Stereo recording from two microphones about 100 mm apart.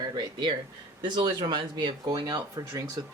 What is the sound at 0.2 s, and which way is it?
Speech, 50° right (ahead or behind).